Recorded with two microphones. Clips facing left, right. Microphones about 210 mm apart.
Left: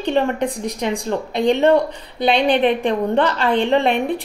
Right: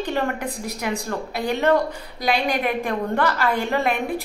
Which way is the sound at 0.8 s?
30° left (ahead or behind).